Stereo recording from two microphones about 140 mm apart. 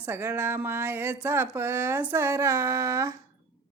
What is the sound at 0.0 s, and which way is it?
A man's voice, 15° right (ahead or behind).